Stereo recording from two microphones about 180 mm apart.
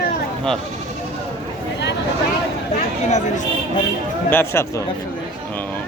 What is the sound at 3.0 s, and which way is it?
Speech, 40° left (ahead or behind).